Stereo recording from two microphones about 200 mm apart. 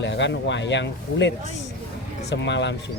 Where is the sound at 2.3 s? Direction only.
60° left (ahead or behind).